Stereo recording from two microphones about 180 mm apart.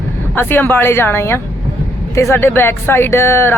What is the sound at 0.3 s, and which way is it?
Speech, 10° left (ahead or behind).